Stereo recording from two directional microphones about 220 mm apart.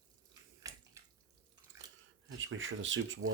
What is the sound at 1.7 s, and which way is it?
Drip, 15° right (ahead or behind).